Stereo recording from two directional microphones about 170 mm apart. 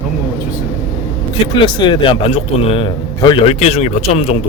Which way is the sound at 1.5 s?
30° left (ahead or behind).